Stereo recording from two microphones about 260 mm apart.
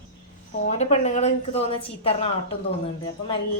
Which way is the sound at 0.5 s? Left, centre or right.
Left.